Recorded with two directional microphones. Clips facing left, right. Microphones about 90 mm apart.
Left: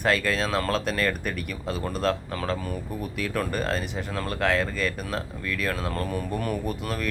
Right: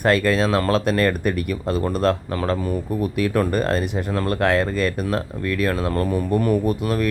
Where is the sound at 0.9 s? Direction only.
45° right (ahead or behind).